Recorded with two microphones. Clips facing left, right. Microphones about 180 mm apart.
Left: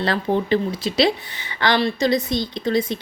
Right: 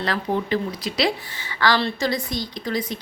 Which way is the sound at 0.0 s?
30° left (ahead or behind).